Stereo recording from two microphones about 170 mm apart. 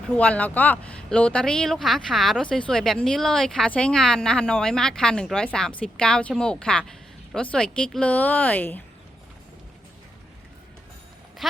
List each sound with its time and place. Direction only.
0.1 s a woman's voice: 5° left (ahead or behind)